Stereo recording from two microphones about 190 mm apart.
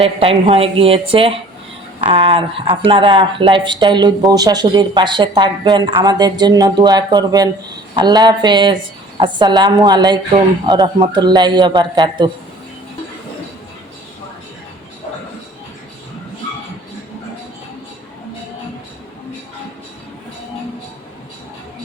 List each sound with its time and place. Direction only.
0.2 s speech: 30° right (ahead or behind)